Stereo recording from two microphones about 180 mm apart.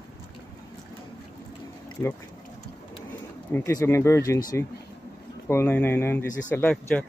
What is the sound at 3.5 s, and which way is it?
Speech, 15° left (ahead or behind).